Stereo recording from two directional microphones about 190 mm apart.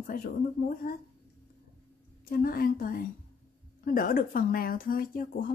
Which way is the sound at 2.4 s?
50° left (ahead or behind).